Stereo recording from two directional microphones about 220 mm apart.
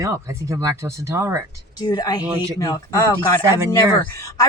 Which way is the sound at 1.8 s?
20° left (ahead or behind).